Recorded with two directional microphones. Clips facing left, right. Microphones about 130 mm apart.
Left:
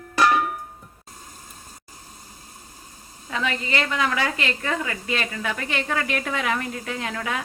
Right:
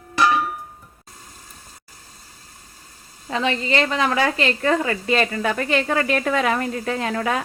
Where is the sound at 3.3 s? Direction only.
30° right (ahead or behind).